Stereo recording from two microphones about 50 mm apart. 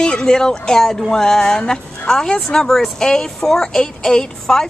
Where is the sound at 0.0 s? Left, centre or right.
Centre.